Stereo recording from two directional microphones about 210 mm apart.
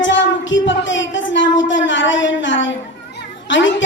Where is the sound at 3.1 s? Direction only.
60° left (ahead or behind).